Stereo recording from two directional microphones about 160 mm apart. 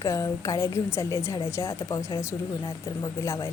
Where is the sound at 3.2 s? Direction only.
20° left (ahead or behind).